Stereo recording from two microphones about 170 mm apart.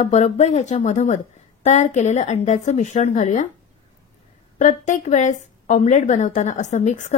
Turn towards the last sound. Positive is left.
turn(degrees=45)  # may be behind; listen again after turning